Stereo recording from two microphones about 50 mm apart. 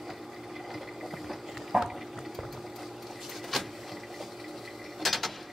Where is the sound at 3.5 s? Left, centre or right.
Centre.